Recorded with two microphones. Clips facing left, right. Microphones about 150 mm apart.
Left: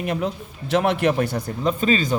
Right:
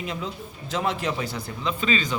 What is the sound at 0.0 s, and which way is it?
Speech, 60° left (ahead or behind).